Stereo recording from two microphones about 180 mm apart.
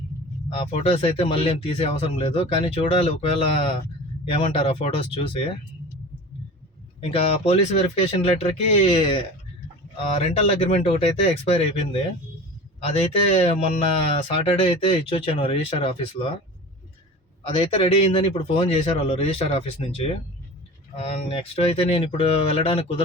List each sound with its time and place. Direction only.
0.5 s speech: 30° left (ahead or behind)
7.0 s speech: 35° left (ahead or behind)
17.4 s speech: 30° left (ahead or behind)